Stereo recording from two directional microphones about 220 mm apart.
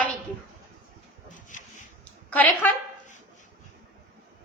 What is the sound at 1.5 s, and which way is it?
Rub, 35° left (ahead or behind).